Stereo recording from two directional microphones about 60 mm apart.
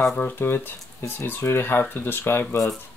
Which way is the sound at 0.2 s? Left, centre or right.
Left.